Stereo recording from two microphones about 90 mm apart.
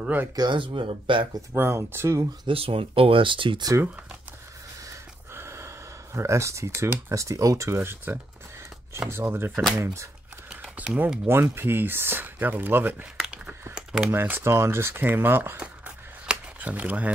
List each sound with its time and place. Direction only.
0.0 s speech: 20° right (ahead or behind)
0.4 s speech: 65° right (ahead or behind)
1.5 s speech: 30° right (ahead or behind)
2.4 s speech: 90° right; by 3.6 s 70° right (ahead or behind)
4.8 s speech: 30° right (ahead or behind)
10.9 s speech: 10° right (ahead or behind)
11.2 s speech: 25° right (ahead or behind)
13.7 s a sound: 5° right (ahead or behind)
14.1 s speech: 25° right (ahead or behind)
16.3 s a sound: 15° right (ahead or behind)